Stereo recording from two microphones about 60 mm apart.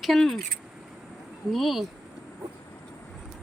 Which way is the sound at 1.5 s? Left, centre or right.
Centre.